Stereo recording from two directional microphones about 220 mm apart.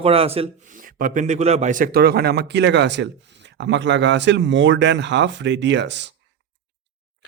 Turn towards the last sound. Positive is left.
turn(degrees=-55)  # may be behind; listen again after turning